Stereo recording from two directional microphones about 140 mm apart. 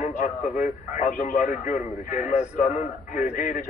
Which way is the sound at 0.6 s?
75° left (ahead or behind).